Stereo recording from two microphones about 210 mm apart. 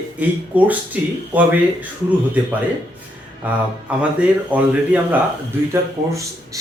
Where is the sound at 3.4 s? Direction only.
5° right (ahead or behind).